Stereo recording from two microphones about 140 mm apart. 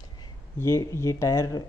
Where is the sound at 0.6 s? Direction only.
20° left (ahead or behind).